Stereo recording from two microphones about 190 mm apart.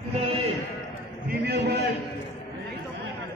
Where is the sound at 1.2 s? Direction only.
55° right (ahead or behind).